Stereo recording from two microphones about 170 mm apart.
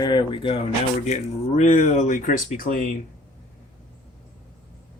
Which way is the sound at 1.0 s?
45° left (ahead or behind).